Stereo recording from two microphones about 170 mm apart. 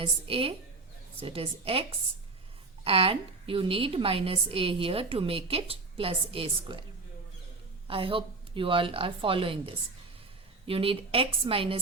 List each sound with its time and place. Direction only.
0.0 s a woman's voice: 35° right (ahead or behind)
2.8 s a woman's voice: 35° right (ahead or behind)
7.9 s a woman's voice: 30° right (ahead or behind)